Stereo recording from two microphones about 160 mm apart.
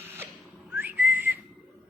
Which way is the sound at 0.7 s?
10° right (ahead or behind).